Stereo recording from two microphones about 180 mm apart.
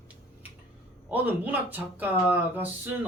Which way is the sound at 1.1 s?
10° right (ahead or behind).